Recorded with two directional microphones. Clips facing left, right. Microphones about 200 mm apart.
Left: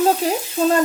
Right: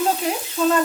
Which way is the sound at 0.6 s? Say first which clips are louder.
Left 1 dB; 40° left (ahead or behind).